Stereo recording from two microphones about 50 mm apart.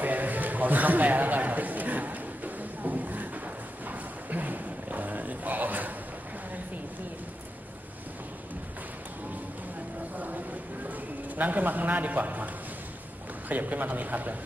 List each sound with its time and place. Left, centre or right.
0.0 s a sound: right
10.1 s vehicle: right
11.3 s a man's voice: right
13.5 s a man's voice: right